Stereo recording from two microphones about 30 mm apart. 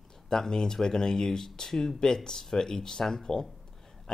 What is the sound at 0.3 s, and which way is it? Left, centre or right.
Speech, left.